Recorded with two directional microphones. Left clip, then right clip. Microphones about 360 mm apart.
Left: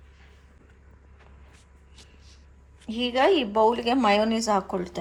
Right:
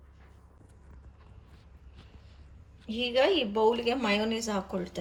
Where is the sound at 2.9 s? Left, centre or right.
Left.